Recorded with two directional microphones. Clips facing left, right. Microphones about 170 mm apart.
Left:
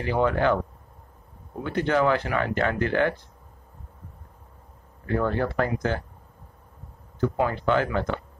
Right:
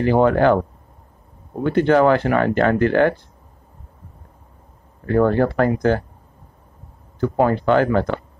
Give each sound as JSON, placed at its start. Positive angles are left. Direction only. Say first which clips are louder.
{"t": 0.3, "sound": "speech", "louder": "right 7 dB", "side_deg": -55}
{"t": 1.6, "sound": "speech", "louder": "right 8 dB", "side_deg": -50}
{"t": 5.0, "sound": "speech", "louder": "right 8 dB", "side_deg": -50}
{"t": 7.2, "sound": "speech", "louder": "right 7 dB", "side_deg": -40}
{"t": 7.7, "sound": "speech", "louder": "right 8 dB", "side_deg": -55}